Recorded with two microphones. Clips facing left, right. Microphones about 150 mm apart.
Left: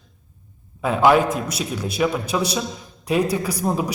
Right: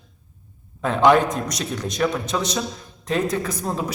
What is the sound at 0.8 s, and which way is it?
A man's voice, 5° left (ahead or behind).